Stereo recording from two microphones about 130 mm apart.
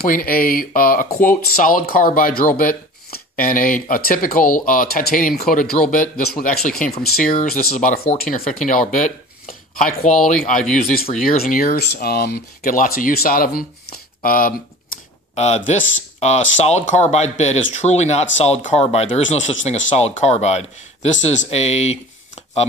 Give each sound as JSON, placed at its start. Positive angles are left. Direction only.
{"t": 0.0, "sound": "speech", "side_deg": 90}
{"t": 7.9, "sound": "speech", "side_deg": 55}
{"t": 8.3, "sound": "speech", "side_deg": 85}
{"t": 11.2, "sound": "speech", "side_deg": 90}
{"t": 15.3, "sound": "speech", "side_deg": 60}